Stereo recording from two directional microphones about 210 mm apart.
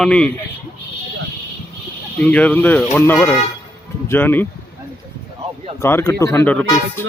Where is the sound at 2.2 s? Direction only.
5° left (ahead or behind).